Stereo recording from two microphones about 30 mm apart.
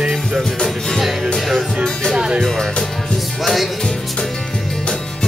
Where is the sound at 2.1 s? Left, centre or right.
Right.